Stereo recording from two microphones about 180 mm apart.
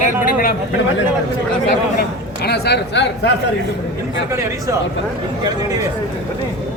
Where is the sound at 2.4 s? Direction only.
65° left (ahead or behind).